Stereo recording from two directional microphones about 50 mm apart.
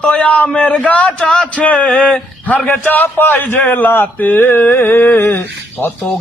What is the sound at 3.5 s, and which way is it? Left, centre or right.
Speech, left.